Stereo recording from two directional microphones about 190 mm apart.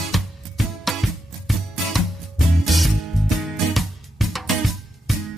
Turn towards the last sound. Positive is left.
turn(degrees=0)  # may be behind; listen again after turning